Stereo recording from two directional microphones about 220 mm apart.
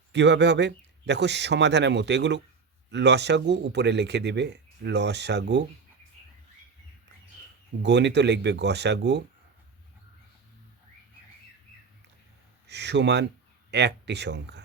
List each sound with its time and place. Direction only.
0.1 s speech: 50° right (ahead or behind)
7.8 s speech: 50° right (ahead or behind)
12.6 s speech: 50° right (ahead or behind)